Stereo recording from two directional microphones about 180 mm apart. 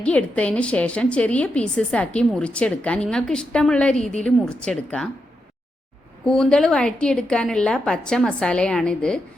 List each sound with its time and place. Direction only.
0.0 s a woman's voice: 5° left (ahead or behind)
6.2 s a woman's voice: 5° left (ahead or behind)